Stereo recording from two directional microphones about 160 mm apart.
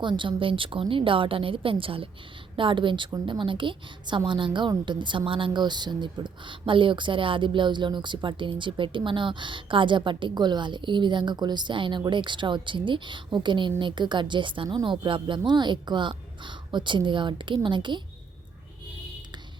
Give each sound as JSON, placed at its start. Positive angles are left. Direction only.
{"t": 0.0, "sound": "a woman's voice", "side_deg": -30}